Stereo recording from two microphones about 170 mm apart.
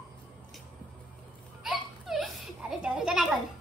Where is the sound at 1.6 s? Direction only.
Centre (ahead or behind).